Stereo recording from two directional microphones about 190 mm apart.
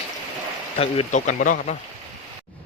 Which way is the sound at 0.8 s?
35° left (ahead or behind).